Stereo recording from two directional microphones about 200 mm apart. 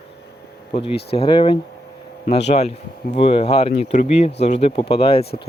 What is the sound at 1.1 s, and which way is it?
Speech, 25° left (ahead or behind).